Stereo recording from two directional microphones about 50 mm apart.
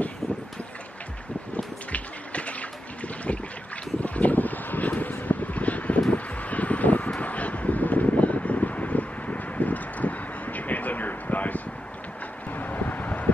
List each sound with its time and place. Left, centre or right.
1.9 s a sound: left
4.0 s wind: left
7.2 s vehicle: left